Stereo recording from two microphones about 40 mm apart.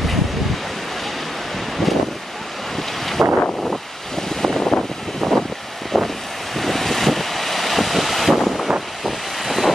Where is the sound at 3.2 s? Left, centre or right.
Right.